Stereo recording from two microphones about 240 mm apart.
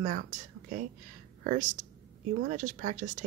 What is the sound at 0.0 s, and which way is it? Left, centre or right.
Speech, right.